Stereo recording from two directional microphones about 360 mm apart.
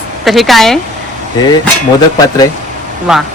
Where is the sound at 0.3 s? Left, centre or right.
Centre.